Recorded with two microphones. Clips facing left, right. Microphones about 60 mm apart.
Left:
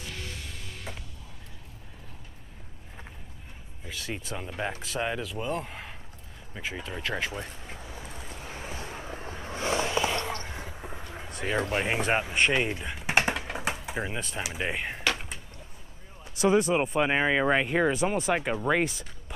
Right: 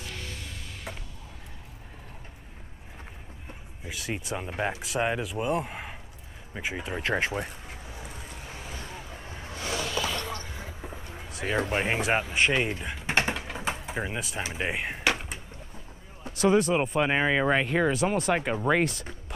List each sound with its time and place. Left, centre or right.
3.8 s speech: centre
8.5 s a sound: left
10.7 s vehicle: centre
11.2 s speech: centre
13.0 s typing: centre
13.5 s door: centre
14.6 s a sound: centre
16.3 s speech: centre